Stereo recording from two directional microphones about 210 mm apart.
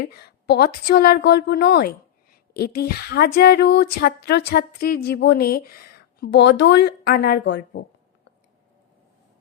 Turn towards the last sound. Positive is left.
turn(degrees=50)  # may be behind; listen again after turning